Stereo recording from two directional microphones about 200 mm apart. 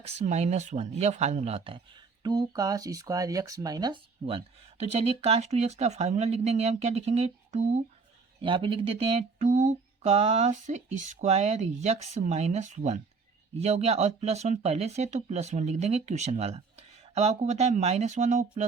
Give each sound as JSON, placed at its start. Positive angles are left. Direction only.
{"t": 0.0, "sound": "speech", "side_deg": -35}
{"t": 8.4, "sound": "speech", "side_deg": -25}